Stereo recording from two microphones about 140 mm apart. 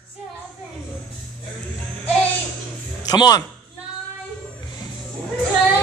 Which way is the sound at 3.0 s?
30° left (ahead or behind).